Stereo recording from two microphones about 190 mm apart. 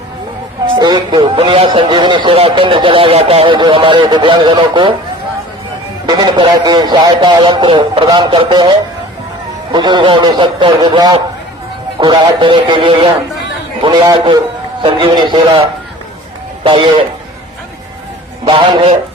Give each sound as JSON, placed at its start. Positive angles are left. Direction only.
{"t": 0.8, "sound": "a man's voice", "side_deg": -25}
{"t": 6.1, "sound": "a man's voice", "side_deg": -20}
{"t": 16.6, "sound": "a man's voice", "side_deg": -25}
{"t": 18.4, "sound": "a man's voice", "side_deg": -25}